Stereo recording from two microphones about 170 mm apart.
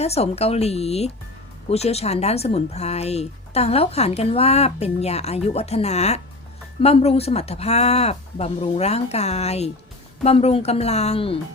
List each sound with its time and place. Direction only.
0.0 s speech: 40° left (ahead or behind)